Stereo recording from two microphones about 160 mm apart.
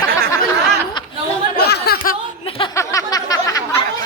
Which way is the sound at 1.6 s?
85° left.